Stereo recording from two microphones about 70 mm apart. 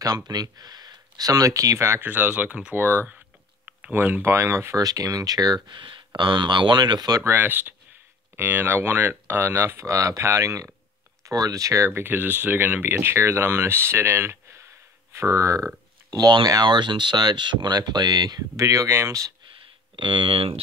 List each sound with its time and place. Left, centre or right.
0.0 s speech: right
2.0 s speech: right
4.7 s speech: right
7.2 s speech: right
12.0 s speech: right
15.1 s speech: right
16.1 s speech: right
18.6 s speech: right